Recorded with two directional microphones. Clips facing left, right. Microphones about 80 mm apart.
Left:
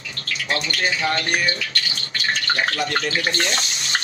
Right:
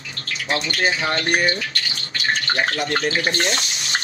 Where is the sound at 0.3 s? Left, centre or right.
Right.